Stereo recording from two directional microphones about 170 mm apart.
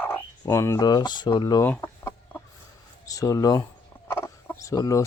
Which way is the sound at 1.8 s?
15° left (ahead or behind).